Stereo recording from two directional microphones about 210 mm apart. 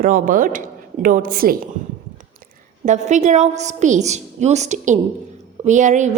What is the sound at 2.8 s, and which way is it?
A woman's voice, 35° right (ahead or behind).